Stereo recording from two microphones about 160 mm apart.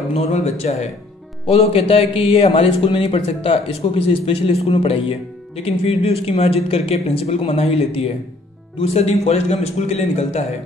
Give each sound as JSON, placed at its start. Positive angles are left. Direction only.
{"t": 0.1, "sound": "speech", "side_deg": 40}